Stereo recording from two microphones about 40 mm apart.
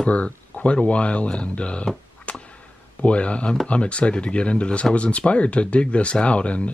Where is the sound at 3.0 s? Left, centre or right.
Left.